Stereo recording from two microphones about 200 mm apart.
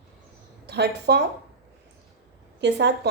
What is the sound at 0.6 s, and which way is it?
Speech, 55° right (ahead or behind).